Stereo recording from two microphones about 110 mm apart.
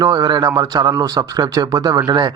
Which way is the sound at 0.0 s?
35° right (ahead or behind).